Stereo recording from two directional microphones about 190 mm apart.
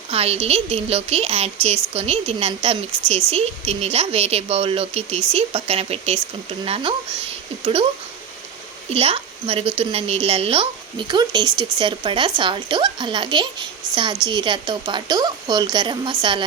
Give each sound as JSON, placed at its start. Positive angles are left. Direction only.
{"t": 0.1, "sound": "a woman's voice", "side_deg": -30}
{"t": 8.9, "sound": "a woman's voice", "side_deg": -30}